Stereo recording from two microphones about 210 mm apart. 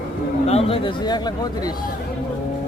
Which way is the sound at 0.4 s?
30° left (ahead or behind).